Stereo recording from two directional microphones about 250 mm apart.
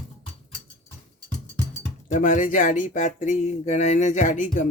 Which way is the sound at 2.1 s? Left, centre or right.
Left.